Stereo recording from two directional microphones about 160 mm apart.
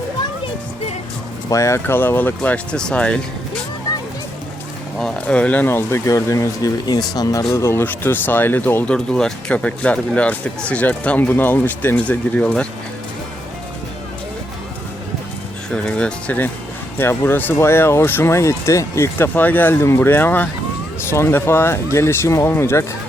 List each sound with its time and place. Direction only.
1.5 s speech: 20° left (ahead or behind)
4.9 s speech: 5° left (ahead or behind)
15.7 s speech: 5° left (ahead or behind)